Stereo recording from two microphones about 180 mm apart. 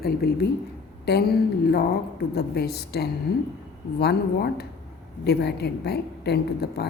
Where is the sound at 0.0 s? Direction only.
60° left (ahead or behind).